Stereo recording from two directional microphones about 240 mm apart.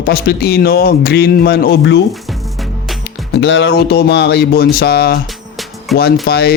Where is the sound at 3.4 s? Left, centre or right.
Left.